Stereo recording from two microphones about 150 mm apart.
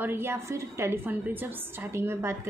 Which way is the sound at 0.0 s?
15° right (ahead or behind).